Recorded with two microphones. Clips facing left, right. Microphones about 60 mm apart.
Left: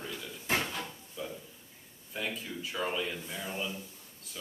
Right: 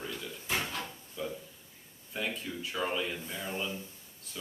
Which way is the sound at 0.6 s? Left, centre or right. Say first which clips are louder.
Even; centre.